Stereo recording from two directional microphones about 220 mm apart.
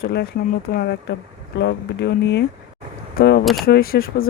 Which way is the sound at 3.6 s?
45° left (ahead or behind).